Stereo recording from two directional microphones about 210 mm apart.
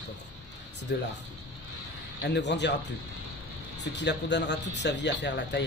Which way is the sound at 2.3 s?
55° left (ahead or behind).